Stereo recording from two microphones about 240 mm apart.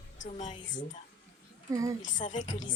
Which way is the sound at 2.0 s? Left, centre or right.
Left.